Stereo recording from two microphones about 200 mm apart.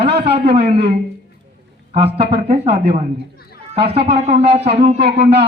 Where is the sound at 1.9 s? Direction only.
30° right (ahead or behind).